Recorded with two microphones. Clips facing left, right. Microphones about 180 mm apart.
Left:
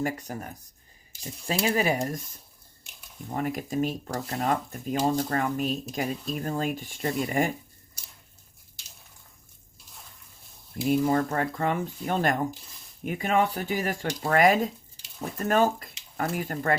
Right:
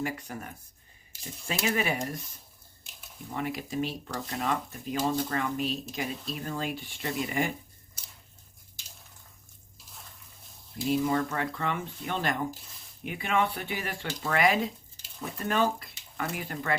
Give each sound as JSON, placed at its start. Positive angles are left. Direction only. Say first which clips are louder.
{"t": 0.0, "sound": "speech", "louder": "left 4 dB", "side_deg": 40}
{"t": 10.8, "sound": "speech", "louder": "left 3 dB", "side_deg": 50}